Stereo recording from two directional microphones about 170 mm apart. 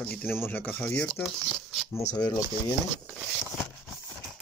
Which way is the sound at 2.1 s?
25° left (ahead or behind).